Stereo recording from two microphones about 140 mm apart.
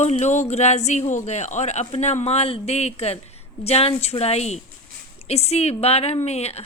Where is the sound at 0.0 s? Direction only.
55° left (ahead or behind).